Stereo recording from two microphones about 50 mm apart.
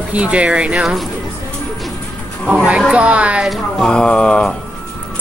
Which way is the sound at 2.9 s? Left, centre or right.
Right.